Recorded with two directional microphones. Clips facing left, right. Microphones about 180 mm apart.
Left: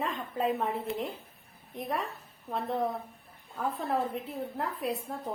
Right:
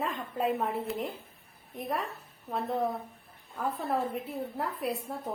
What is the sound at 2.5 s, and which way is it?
A woman's voice, 5° right (ahead or behind).